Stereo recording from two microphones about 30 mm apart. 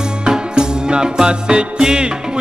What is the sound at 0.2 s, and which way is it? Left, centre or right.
Music, right.